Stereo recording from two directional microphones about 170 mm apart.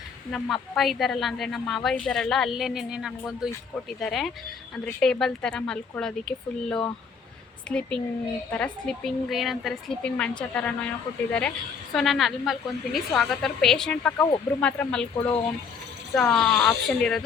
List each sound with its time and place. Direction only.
0.3 s a woman's voice: centre (ahead or behind)
16.1 s a woman's voice: centre (ahead or behind)